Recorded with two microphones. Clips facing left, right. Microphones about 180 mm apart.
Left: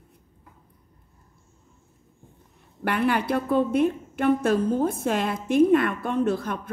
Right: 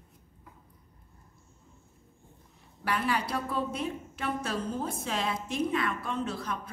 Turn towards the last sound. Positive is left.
turn(degrees=55)  # may be behind; listen again after turning